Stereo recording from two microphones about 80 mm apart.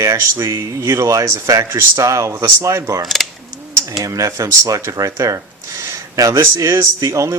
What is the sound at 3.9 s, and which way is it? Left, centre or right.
Speech, right.